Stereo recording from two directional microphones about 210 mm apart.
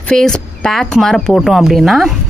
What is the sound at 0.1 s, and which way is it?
A woman's voice, 5° left (ahead or behind).